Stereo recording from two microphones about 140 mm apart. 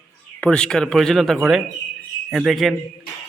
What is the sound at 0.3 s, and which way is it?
A man's voice, 5° left (ahead or behind).